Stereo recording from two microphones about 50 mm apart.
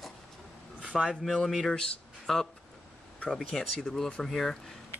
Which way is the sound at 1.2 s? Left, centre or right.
Centre.